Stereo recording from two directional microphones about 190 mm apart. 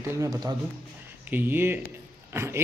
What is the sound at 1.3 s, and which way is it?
Speech, 10° right (ahead or behind).